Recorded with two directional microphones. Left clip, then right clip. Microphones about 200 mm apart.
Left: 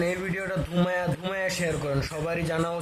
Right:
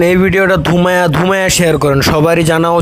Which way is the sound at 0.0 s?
45° right (ahead or behind).